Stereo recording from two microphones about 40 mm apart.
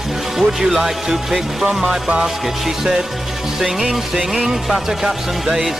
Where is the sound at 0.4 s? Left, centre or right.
Centre.